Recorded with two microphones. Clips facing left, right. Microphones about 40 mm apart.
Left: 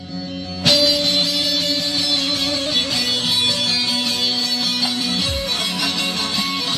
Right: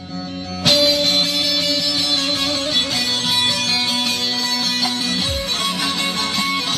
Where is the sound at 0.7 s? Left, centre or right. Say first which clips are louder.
Right 1 dB; right.